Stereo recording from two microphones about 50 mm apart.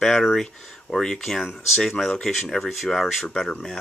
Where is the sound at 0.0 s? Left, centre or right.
Centre.